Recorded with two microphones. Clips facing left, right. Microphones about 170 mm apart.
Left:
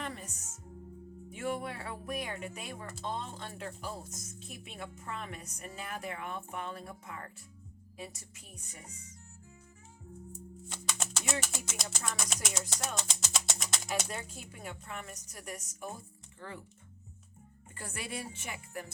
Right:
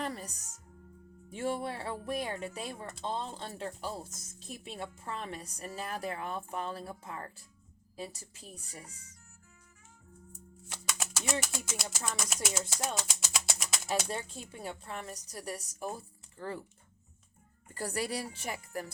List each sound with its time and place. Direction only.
0.0 s music: 35° right (ahead or behind)
1.3 s a woman's voice: 30° right (ahead or behind)
10.9 s speech: 5° right (ahead or behind)
13.8 s a woman's voice: 30° right (ahead or behind)
17.7 s a woman's voice: 35° right (ahead or behind)